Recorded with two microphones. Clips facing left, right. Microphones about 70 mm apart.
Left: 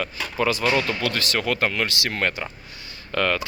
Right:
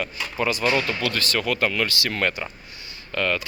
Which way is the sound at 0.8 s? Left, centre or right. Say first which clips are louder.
Left 1 dB; left.